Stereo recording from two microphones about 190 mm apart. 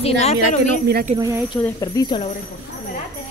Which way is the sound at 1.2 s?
15° right (ahead or behind).